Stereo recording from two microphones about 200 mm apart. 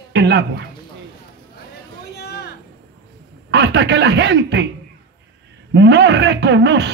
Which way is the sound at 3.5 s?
60° right (ahead or behind).